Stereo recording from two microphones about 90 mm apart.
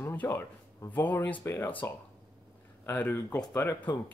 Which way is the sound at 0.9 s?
20° left (ahead or behind).